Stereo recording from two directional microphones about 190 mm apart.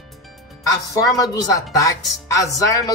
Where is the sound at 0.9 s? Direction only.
20° left (ahead or behind).